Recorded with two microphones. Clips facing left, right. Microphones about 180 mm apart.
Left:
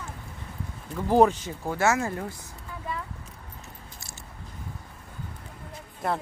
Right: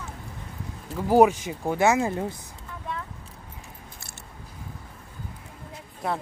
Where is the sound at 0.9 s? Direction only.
10° right (ahead or behind).